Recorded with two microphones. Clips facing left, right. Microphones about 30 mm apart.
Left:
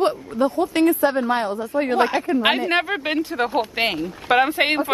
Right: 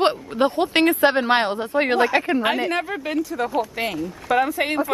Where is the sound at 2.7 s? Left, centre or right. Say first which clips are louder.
Left 3 dB; left.